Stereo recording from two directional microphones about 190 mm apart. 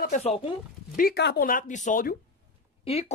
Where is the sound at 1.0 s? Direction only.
55° left (ahead or behind).